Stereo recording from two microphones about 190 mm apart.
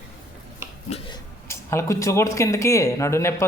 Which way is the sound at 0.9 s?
30° left (ahead or behind).